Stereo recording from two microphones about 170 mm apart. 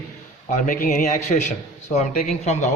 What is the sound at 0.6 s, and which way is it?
Speech, 55° left (ahead or behind).